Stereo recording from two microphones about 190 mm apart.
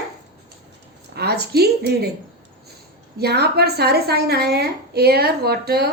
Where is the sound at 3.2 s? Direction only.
60° right (ahead or behind).